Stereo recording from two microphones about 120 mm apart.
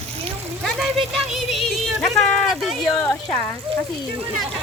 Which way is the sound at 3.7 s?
50° right (ahead or behind).